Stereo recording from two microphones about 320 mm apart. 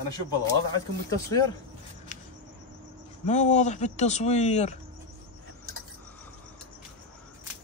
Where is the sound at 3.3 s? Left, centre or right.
Left.